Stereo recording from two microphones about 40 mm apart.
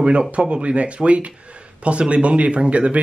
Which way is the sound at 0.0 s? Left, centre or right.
Right.